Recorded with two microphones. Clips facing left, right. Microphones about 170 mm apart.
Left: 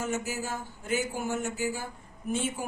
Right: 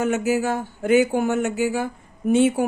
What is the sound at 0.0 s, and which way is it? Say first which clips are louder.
Speech: right 11 dB; 70° right (ahead or behind).